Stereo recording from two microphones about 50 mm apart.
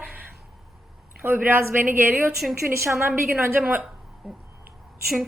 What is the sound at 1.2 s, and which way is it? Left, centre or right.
A woman's voice, right.